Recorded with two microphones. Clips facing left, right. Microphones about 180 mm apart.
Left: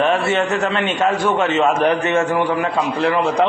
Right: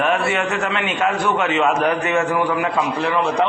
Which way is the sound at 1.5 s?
45° left (ahead or behind).